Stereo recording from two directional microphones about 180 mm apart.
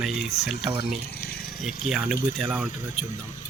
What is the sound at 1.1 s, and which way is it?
Water, 60° left (ahead or behind).